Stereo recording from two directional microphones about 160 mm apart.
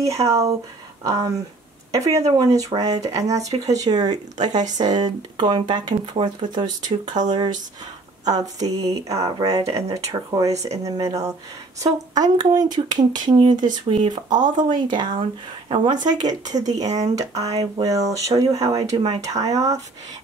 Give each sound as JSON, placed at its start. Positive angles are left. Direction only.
{"t": 0.0, "sound": "speech", "side_deg": -20}